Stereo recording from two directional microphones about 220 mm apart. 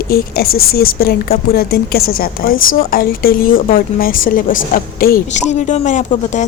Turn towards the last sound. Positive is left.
turn(degrees=35)  # may be behind; listen again after turning